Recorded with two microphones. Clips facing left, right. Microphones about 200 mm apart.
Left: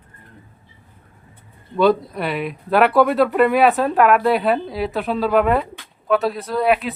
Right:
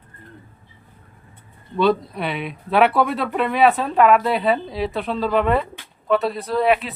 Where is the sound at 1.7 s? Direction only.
Centre (ahead or behind).